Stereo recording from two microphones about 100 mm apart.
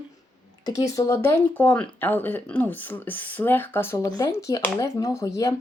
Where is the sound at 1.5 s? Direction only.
15° left (ahead or behind).